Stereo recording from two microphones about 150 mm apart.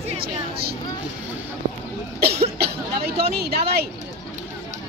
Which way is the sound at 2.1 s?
90° right.